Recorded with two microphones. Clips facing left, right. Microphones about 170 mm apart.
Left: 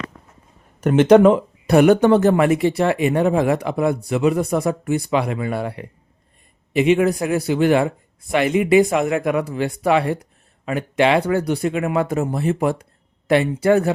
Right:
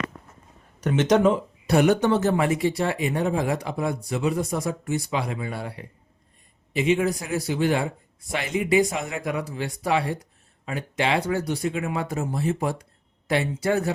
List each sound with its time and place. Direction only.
0.8 s speech: 55° left (ahead or behind)